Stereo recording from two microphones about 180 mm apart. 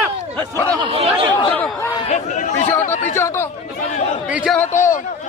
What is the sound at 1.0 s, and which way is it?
Chatter, 30° right (ahead or behind).